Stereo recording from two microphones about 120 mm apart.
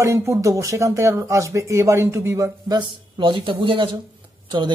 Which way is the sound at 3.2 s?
45° right (ahead or behind).